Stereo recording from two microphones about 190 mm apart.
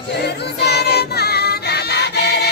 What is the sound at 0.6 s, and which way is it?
Choir, 60° left (ahead or behind).